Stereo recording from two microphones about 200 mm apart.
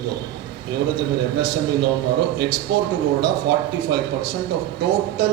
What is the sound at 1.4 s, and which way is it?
A man's voice, 55° right (ahead or behind).